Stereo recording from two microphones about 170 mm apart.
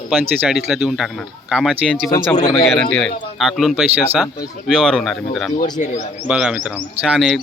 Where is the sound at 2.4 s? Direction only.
25° left (ahead or behind).